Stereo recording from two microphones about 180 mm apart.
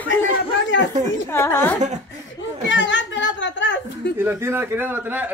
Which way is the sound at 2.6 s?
90° left.